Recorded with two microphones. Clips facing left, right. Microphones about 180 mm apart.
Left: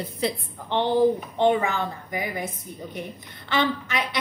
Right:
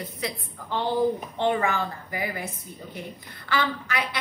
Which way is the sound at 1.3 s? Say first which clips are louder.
Left 3 dB; 15° left (ahead or behind).